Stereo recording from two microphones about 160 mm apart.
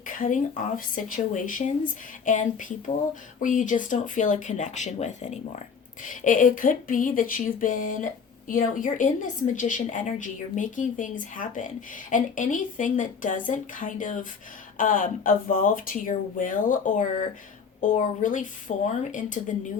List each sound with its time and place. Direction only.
0.0 s speech: 55° left (ahead or behind)